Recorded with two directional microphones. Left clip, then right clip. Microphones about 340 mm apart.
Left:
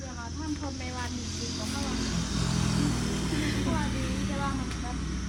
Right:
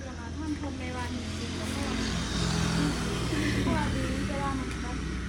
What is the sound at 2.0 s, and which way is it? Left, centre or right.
Music, centre.